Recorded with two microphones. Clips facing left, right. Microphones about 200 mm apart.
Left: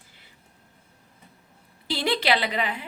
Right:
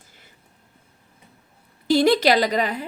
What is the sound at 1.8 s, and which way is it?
A woman's voice, 45° right (ahead or behind).